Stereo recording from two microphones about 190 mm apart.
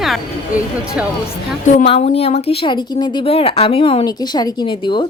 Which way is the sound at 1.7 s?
35° left (ahead or behind).